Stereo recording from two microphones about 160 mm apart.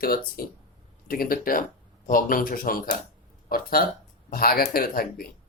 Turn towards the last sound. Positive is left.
turn(degrees=65)  # may be behind; listen again after turning